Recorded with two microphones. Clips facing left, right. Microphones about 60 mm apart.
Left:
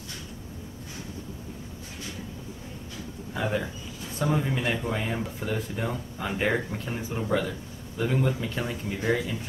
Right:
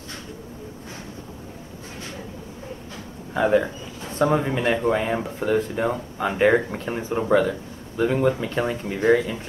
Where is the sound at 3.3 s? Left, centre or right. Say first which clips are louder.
Right 10 dB; right.